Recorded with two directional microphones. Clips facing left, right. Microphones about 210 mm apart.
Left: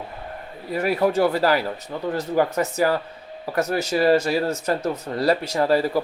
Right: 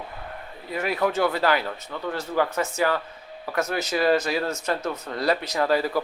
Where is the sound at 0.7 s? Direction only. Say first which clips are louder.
Left 4 dB; 35° left (ahead or behind).